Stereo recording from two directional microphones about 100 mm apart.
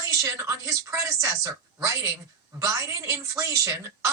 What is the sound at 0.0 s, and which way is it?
Speech, 35° right (ahead or behind).